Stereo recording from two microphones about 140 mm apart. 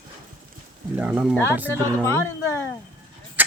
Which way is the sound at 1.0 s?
10° right (ahead or behind).